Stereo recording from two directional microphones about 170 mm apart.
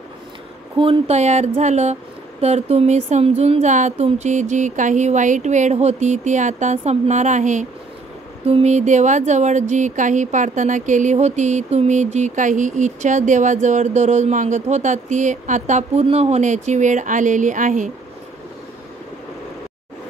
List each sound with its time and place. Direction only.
0.7 s speech: 35° right (ahead or behind)